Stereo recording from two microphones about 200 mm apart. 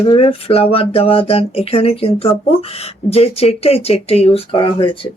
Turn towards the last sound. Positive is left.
turn(degrees=25)  # may be behind; listen again after turning